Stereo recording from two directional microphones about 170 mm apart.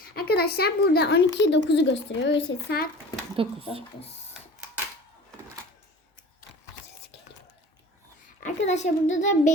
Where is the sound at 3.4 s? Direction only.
30° right (ahead or behind).